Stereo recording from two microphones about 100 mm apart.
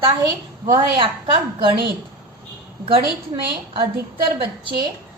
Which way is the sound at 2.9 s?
60° right (ahead or behind).